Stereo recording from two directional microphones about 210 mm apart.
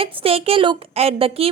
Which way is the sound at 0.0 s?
25° right (ahead or behind).